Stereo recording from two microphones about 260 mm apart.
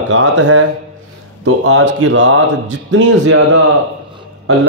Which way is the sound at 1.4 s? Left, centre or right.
Right.